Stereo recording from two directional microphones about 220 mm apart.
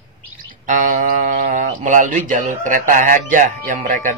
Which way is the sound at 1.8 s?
35° right (ahead or behind).